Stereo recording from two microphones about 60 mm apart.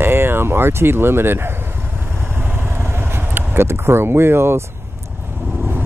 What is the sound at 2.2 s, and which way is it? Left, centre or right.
Vehicle, right.